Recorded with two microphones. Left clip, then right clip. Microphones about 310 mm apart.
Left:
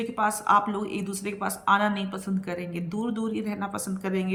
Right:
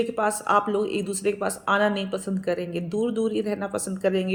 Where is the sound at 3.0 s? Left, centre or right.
Left.